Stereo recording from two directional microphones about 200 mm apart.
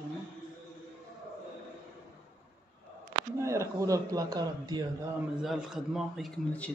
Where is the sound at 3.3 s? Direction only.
15° right (ahead or behind).